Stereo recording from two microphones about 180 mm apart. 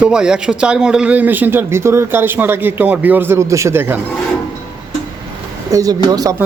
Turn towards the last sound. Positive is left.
turn(degrees=-20)  # may be behind; listen again after turning